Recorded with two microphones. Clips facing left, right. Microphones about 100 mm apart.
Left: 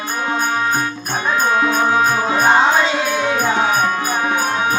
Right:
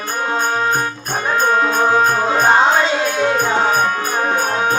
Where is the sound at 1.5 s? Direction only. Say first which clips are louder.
Right 1 dB; 40° right (ahead or behind).